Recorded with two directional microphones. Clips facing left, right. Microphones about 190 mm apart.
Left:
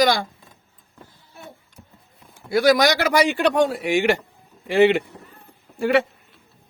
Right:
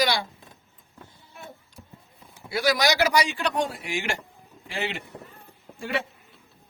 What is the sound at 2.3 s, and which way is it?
A man's voice, 50° left (ahead or behind).